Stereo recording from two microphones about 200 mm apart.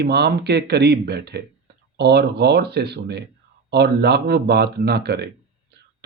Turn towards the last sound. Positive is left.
turn(degrees=-55)  # may be behind; listen again after turning